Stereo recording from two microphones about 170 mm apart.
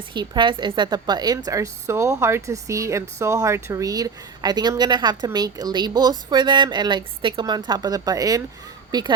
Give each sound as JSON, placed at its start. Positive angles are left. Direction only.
{"t": 0.1, "sound": "speech", "side_deg": -25}